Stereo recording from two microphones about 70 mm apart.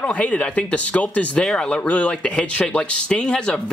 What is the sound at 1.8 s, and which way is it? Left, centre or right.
Speech, centre.